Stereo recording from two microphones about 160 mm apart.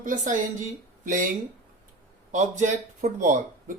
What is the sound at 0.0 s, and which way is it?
Speech, 55° right (ahead or behind).